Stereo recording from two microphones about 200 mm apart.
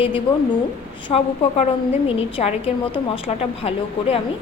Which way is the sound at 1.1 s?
20° left (ahead or behind).